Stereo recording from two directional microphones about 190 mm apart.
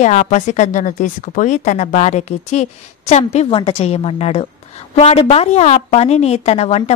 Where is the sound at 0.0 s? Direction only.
40° left (ahead or behind).